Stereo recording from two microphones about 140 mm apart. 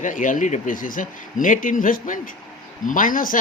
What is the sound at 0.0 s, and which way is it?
Speech, 70° left (ahead or behind).